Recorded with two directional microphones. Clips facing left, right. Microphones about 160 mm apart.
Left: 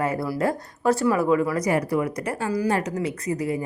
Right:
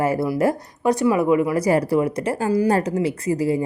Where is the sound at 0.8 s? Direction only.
15° right (ahead or behind).